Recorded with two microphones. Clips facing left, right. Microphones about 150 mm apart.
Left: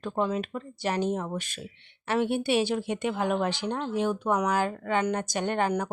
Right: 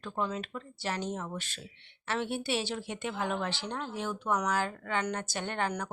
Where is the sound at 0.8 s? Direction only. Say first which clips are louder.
Left 7 dB; 15° left (ahead or behind).